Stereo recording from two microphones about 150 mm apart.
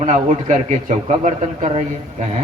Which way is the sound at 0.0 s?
50° right (ahead or behind).